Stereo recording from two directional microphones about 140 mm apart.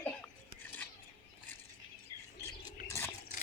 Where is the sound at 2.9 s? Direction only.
15° left (ahead or behind).